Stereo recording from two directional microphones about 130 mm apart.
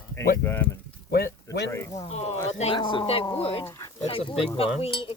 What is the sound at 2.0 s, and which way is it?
Speech, 55° left (ahead or behind).